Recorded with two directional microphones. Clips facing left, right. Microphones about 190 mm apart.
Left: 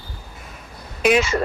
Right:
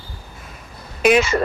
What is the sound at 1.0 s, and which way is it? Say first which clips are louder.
Speech: right 2 dB; 60° right (ahead or behind).